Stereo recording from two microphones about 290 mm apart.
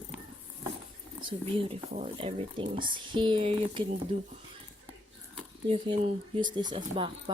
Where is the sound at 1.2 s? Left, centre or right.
Centre.